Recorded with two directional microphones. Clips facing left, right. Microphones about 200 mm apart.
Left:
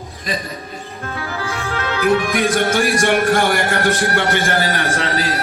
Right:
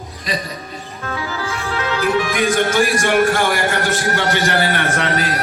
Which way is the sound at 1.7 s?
55° left (ahead or behind).